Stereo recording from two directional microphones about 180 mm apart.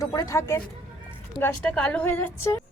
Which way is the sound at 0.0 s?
20° left (ahead or behind).